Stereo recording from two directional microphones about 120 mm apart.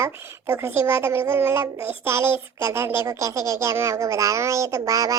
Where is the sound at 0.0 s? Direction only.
20° right (ahead or behind).